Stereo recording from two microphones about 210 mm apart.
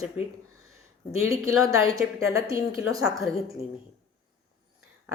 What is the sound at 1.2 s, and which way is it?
A woman's voice, 15° right (ahead or behind).